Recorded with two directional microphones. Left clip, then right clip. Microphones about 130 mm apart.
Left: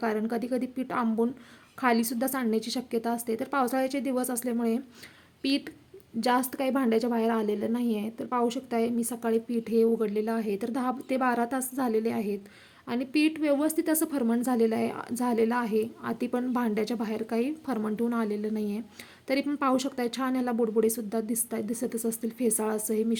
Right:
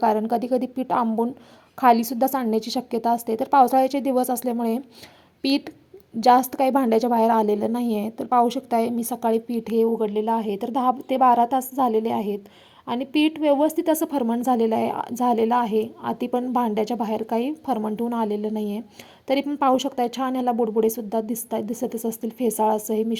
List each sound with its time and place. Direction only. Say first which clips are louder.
0.0 s a woman's voice: right 9 dB; 25° right (ahead or behind)
9.7 s a woman's voice: right 4 dB; 15° right (ahead or behind)